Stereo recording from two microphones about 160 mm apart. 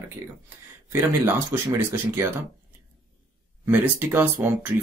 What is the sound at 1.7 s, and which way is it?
Speech, 15° right (ahead or behind).